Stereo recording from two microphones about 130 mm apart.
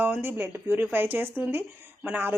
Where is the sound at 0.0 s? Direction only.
15° right (ahead or behind).